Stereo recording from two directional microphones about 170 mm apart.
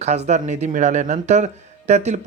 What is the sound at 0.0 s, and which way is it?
Speech, 40° right (ahead or behind).